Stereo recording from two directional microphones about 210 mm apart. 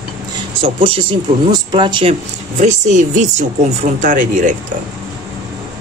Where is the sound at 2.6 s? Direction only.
35° right (ahead or behind).